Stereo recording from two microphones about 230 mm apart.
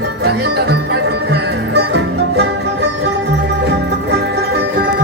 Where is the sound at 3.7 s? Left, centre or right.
Right.